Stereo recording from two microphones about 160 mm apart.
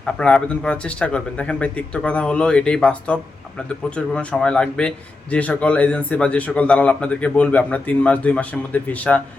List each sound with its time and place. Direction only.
0.0 s a man's voice: 5° left (ahead or behind)